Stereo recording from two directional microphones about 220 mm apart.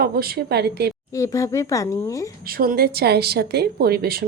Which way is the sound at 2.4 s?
40° right (ahead or behind).